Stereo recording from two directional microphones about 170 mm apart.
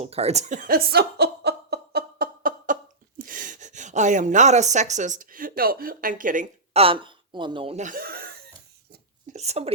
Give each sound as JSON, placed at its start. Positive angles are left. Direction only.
{"t": 0.0, "sound": "a sound", "side_deg": -40}
{"t": 3.2, "sound": "speech", "side_deg": -55}
{"t": 6.7, "sound": "a woman's voice", "side_deg": -30}
{"t": 7.8, "sound": "chuckle", "side_deg": -55}
{"t": 9.3, "sound": "speech", "side_deg": -40}